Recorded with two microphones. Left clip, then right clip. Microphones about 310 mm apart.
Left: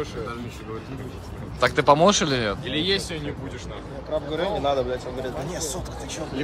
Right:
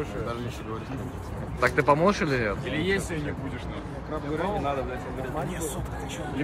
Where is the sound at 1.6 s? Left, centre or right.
Centre.